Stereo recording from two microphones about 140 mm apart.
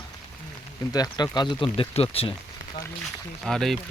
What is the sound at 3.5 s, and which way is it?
Speech, 5° left (ahead or behind).